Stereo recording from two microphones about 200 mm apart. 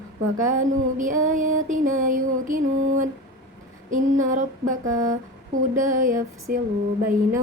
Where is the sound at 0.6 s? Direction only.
40° right (ahead or behind).